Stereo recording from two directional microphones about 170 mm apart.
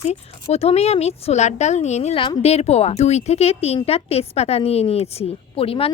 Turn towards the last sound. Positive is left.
turn(degrees=35)  # may be behind; listen again after turning